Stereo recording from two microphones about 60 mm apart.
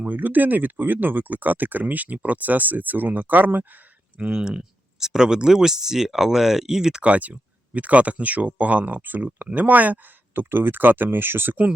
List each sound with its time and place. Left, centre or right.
0.1 s speech: right
4.2 s speech: centre
7.1 s speech: right